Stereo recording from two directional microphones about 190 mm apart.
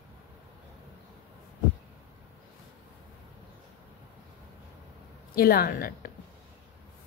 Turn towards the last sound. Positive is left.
turn(degrees=50)  # may be behind; listen again after turning